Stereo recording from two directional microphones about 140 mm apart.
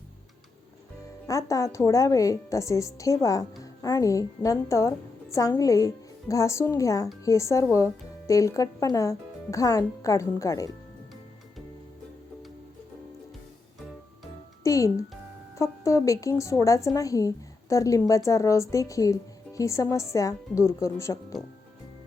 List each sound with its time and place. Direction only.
1.3 s a woman's voice: 20° left (ahead or behind)
14.6 s music: 25° left (ahead or behind)
15.5 s a woman's voice: 20° left (ahead or behind)